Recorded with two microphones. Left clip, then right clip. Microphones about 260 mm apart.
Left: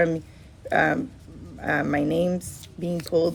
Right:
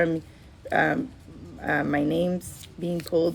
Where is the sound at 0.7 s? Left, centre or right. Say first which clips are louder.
Left 2 dB; left.